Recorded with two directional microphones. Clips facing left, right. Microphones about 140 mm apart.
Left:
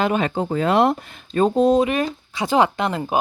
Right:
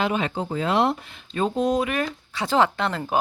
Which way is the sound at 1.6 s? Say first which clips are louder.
Left 6 dB; 25° left (ahead or behind).